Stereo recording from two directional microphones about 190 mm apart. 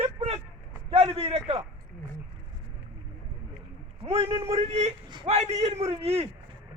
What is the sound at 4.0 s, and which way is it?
A man's voice, 30° right (ahead or behind).